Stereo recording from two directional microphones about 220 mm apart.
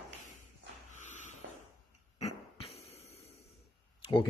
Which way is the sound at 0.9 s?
35° left (ahead or behind).